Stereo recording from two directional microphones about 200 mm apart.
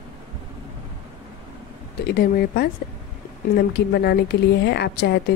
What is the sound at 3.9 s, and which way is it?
A woman's voice, 55° left (ahead or behind).